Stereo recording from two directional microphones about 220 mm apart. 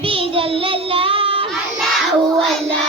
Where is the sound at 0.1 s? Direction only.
25° right (ahead or behind).